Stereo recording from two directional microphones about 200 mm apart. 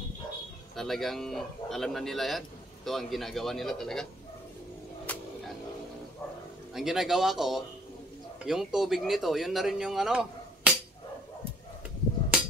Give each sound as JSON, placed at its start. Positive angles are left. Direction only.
{"t": 0.7, "sound": "speech", "side_deg": 0}
{"t": 5.1, "sound": "music", "side_deg": 10}
{"t": 6.7, "sound": "speech", "side_deg": 0}